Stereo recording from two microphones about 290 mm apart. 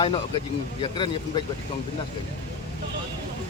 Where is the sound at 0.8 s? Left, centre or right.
Centre.